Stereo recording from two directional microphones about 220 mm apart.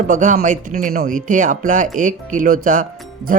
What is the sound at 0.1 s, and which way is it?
Speech, 35° right (ahead or behind).